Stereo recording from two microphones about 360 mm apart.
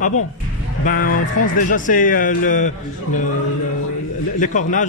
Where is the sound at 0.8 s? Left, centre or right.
Left.